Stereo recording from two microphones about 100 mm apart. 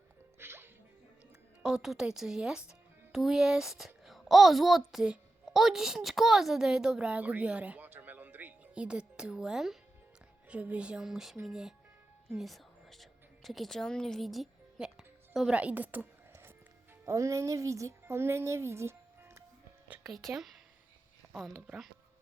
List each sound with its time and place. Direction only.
0.3 s music: 25° right (ahead or behind)
1.6 s a woman's voice: 5° right (ahead or behind)
12.3 s music: centre (ahead or behind); by 16.5 s 20° right (ahead or behind)
17.1 s speech: 30° right (ahead or behind)
20.1 s a woman's voice: 5° right (ahead or behind)